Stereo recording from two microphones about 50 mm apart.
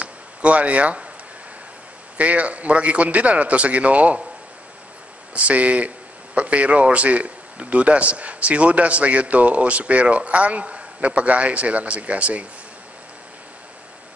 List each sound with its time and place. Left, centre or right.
0.0 s a sound: right
2.1 s a man's voice: right
5.3 s a man's voice: right